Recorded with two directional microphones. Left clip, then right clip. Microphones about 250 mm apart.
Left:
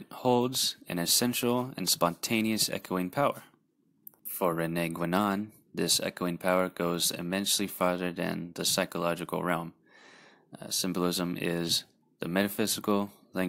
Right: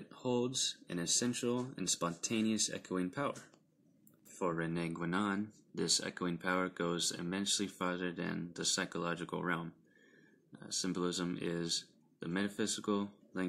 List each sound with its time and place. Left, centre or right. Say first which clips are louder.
0.1 s speech: left 9 dB; left
4.4 s speech: left 8 dB; left